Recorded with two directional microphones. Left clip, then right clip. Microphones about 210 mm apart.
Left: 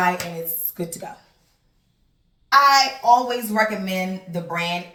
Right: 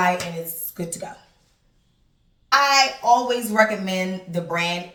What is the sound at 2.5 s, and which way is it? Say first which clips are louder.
Speech: left 2 dB; 15° right (ahead or behind).